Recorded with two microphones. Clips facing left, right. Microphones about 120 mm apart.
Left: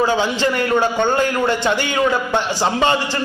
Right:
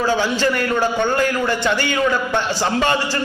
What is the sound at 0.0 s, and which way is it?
A man's voice, 20° left (ahead or behind).